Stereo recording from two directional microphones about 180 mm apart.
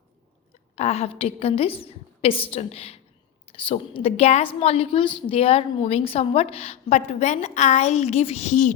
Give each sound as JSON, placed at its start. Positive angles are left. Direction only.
{"t": 0.8, "sound": "a woman's voice", "side_deg": 35}